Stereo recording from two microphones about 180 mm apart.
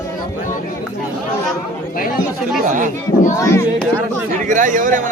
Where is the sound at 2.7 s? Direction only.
45° right (ahead or behind).